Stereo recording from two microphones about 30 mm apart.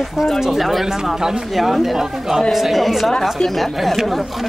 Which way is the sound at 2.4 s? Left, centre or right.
Centre.